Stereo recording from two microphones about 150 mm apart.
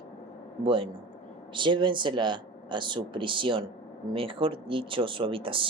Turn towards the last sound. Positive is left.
turn(degrees=-35)  # may be behind; listen again after turning